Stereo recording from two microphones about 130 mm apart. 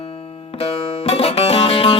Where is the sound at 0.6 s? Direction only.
50° left (ahead or behind).